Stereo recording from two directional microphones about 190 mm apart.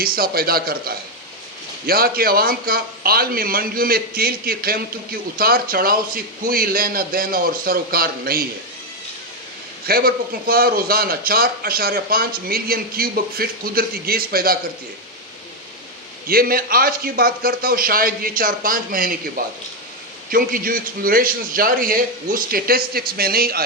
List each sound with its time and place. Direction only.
0.0 s speech: 50° right (ahead or behind)
9.8 s speech: 50° right (ahead or behind)
16.2 s speech: 50° right (ahead or behind)
20.3 s speech: 50° right (ahead or behind)